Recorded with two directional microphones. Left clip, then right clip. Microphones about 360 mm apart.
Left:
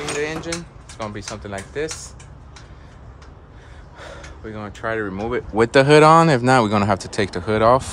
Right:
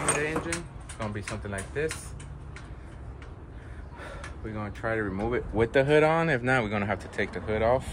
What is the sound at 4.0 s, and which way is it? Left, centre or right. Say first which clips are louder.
Speech: left 5 dB; left.